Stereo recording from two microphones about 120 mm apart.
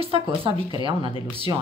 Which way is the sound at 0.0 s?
50° right (ahead or behind).